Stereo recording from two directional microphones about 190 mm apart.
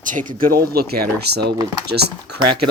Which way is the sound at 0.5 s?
55° right (ahead or behind).